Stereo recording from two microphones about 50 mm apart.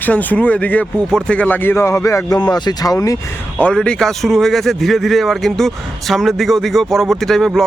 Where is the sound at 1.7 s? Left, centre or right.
Left.